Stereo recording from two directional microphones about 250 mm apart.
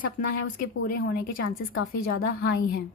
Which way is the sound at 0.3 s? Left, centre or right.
Left.